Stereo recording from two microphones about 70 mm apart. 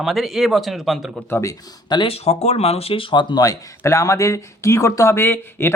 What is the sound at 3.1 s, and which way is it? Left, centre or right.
Speech, left.